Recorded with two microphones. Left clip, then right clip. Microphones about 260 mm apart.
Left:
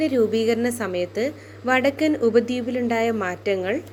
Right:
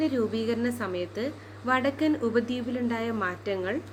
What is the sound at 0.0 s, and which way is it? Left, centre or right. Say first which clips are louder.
A woman's voice: left 8 dB; centre.